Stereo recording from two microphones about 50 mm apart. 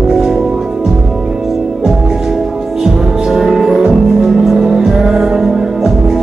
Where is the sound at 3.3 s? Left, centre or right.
Centre.